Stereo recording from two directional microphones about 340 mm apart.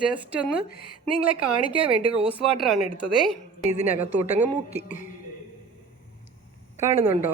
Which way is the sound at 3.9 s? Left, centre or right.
Centre.